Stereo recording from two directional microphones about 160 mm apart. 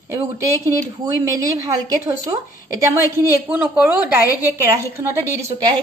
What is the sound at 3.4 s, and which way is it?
Speech, 10° right (ahead or behind).